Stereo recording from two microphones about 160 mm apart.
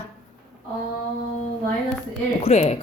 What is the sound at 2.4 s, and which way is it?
Speech, 45° left (ahead or behind).